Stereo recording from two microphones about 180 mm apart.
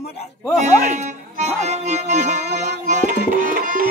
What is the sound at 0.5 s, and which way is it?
Music, 40° right (ahead or behind).